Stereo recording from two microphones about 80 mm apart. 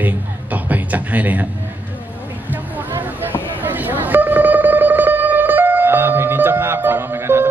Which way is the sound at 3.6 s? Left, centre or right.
Right.